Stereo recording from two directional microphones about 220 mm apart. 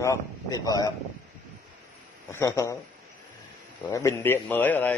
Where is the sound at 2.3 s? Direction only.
15° left (ahead or behind).